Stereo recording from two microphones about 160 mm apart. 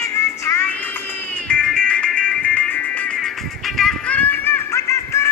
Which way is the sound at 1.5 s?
5° left (ahead or behind).